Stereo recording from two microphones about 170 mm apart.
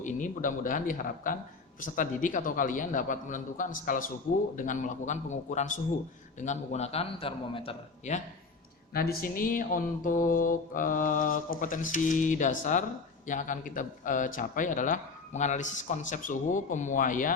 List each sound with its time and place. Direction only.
0.0 s a man's voice: 50° left (ahead or behind)
8.9 s a man's voice: 60° left (ahead or behind)